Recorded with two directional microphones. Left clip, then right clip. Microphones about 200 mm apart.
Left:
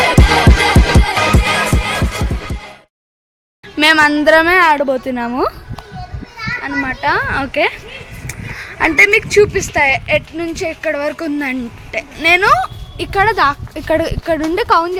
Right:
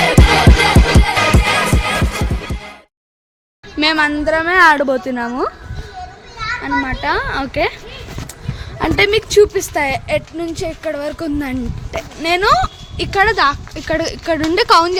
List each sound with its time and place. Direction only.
0.0 s music: centre (ahead or behind)
3.8 s a sound: centre (ahead or behind)
4.6 s a woman's voice: 5° right (ahead or behind)
5.1 s speech: 15° left (ahead or behind)
6.6 s speech: 5° left (ahead or behind)